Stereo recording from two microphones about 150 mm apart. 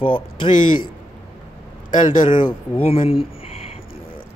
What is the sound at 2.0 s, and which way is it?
Speech, 30° left (ahead or behind).